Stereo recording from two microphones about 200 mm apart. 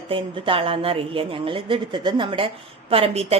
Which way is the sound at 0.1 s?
25° right (ahead or behind).